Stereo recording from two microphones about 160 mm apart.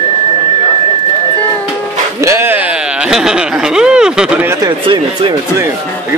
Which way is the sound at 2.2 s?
15° right (ahead or behind).